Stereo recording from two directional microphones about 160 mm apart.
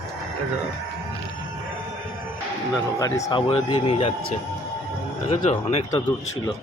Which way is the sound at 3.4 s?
30° left (ahead or behind).